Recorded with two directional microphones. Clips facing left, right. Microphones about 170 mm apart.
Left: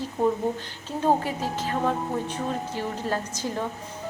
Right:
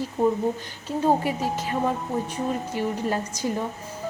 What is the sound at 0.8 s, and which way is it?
Speech, 10° right (ahead or behind).